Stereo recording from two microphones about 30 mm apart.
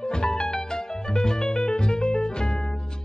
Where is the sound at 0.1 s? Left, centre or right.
Left.